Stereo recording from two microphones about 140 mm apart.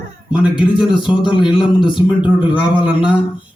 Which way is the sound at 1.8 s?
35° left (ahead or behind).